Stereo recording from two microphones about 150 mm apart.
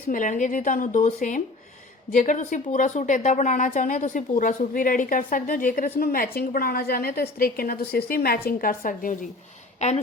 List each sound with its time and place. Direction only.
0.1 s a woman's voice: 60° left (ahead or behind)